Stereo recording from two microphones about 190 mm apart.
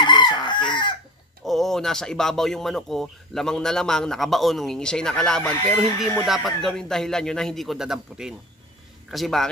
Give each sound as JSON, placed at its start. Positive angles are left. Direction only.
{"t": 0.0, "sound": "chicken", "side_deg": 25}
{"t": 1.4, "sound": "speech", "side_deg": 0}